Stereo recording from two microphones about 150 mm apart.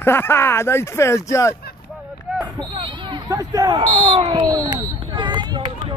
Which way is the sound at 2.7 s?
35° right (ahead or behind).